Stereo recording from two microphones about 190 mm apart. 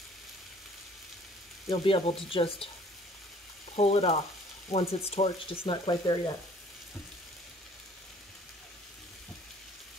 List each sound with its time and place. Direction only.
1.7 s speech: 30° left (ahead or behind)
3.7 s speech: 35° left (ahead or behind)